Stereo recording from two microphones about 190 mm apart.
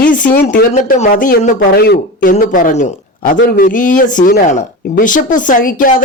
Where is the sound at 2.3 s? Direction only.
45° left (ahead or behind).